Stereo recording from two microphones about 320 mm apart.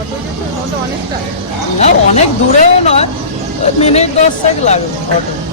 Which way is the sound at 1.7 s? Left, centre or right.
Centre.